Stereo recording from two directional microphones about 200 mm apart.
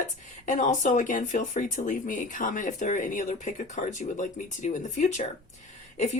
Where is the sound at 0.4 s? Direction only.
40° left (ahead or behind).